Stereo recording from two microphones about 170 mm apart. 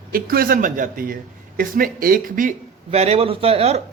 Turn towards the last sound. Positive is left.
turn(degrees=-35)  # may be behind; listen again after turning